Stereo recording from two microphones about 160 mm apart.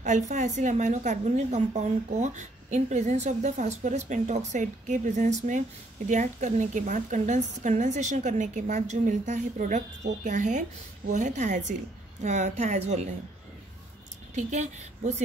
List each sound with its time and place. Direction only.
0.0 s a woman's voice: 50° right (ahead or behind)
14.3 s a woman's voice: 45° right (ahead or behind)